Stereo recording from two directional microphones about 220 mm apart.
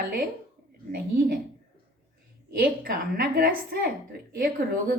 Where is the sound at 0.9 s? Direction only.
45° right (ahead or behind).